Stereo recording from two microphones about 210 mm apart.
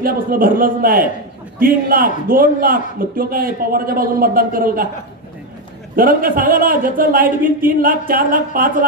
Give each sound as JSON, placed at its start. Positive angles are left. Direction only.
{"t": 0.0, "sound": "a man's voice", "side_deg": -45}
{"t": 5.9, "sound": "speech", "side_deg": -40}